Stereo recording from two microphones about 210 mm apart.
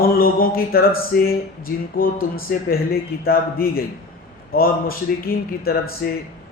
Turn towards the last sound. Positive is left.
turn(degrees=45)  # may be behind; listen again after turning